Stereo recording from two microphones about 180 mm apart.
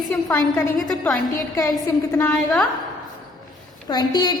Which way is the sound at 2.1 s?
15° left (ahead or behind).